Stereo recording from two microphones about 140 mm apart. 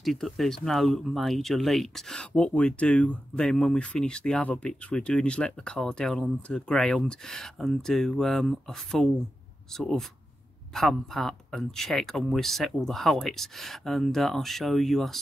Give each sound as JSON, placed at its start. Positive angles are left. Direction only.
{"t": 0.0, "sound": "speech", "side_deg": 0}